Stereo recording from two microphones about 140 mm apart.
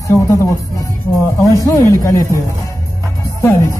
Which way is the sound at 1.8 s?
20° left (ahead or behind).